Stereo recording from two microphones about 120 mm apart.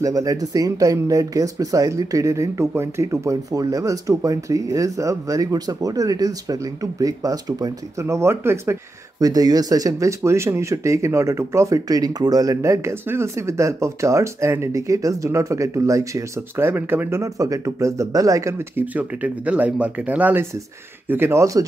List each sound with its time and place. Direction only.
0.0 s speech: 30° right (ahead or behind)